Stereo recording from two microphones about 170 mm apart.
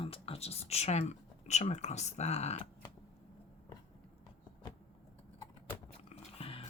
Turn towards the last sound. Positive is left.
turn(degrees=35)  # may be behind; listen again after turning